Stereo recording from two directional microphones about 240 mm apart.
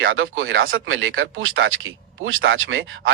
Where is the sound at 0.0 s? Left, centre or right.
Right.